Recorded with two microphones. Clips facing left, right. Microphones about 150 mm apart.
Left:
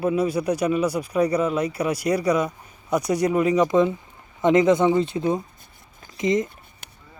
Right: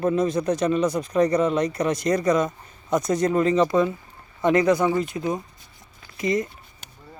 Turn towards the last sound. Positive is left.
turn(degrees=20)  # may be behind; listen again after turning